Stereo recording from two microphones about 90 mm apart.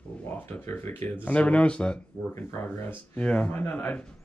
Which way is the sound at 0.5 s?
25° left (ahead or behind).